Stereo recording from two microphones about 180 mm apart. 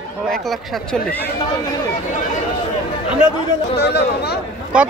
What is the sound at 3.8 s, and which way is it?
Speech, 65° left (ahead or behind).